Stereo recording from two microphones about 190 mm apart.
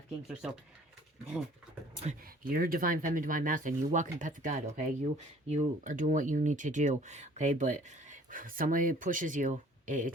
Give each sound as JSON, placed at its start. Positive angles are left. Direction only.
{"t": 2.2, "sound": "speech", "side_deg": -50}